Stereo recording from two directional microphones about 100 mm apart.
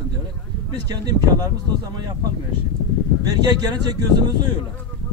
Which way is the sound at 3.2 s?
40° right (ahead or behind).